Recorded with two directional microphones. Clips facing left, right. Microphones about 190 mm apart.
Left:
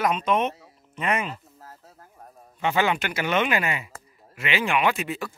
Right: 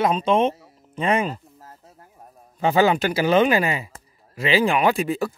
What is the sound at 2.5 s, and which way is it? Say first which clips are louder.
Speech: right 5 dB; 35° right (ahead or behind).